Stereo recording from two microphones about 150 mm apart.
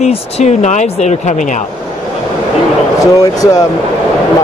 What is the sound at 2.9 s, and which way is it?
Speech, 20° left (ahead or behind).